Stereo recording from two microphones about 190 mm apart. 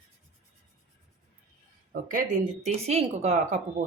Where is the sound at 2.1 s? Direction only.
45° right (ahead or behind).